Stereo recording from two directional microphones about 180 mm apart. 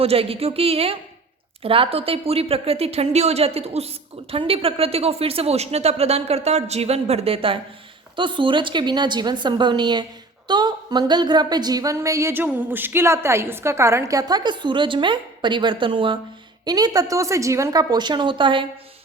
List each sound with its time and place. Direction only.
0.0 s a woman's voice: 30° right (ahead or behind)